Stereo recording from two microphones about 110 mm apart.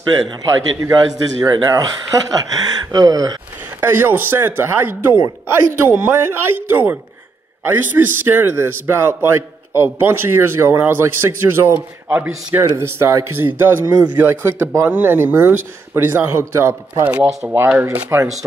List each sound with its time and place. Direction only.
0.8 s speech: 35° right (ahead or behind)
3.8 s a man's voice: 20° right (ahead or behind)